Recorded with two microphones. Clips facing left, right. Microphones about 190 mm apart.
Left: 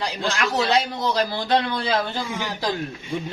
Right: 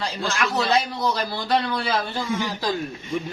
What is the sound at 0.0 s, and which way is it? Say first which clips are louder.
Speech: left 1 dB; 15° left (ahead or behind).